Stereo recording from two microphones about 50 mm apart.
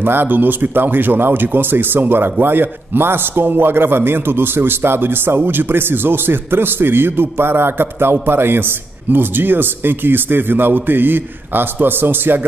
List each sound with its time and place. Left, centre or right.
0.0 s a man's voice: right